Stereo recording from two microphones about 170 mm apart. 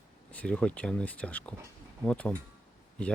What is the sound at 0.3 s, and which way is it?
Speech, 5° left (ahead or behind).